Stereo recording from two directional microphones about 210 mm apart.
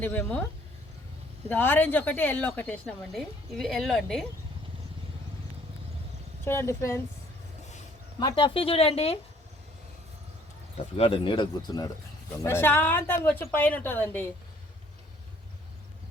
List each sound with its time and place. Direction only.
0.0 s a woman's voice: 10° left (ahead or behind)
1.5 s a woman's voice: 10° left (ahead or behind)
6.4 s a woman's voice: 10° left (ahead or behind)
8.2 s speech: 20° left (ahead or behind)
10.9 s a woman's voice: 25° left (ahead or behind); by 14.3 s 10° left (ahead or behind)